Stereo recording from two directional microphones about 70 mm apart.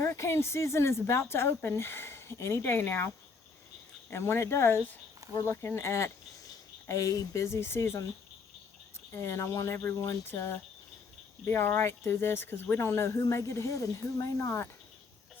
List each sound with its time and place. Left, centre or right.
0.0 s speech: left
4.1 s speech: left
9.1 s speech: left
11.4 s speech: left